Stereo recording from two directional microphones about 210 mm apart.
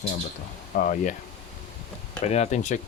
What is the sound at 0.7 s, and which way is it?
Speech, 40° left (ahead or behind).